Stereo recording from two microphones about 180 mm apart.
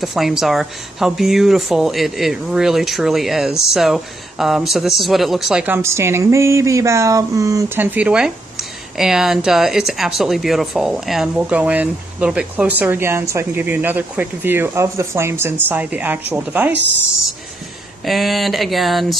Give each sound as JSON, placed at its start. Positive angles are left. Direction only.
{"t": 0.0, "sound": "a woman's voice", "side_deg": 0}
{"t": 18.0, "sound": "speech", "side_deg": 0}